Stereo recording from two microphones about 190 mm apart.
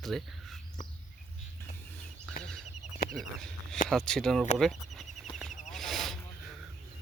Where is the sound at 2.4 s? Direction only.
5° left (ahead or behind).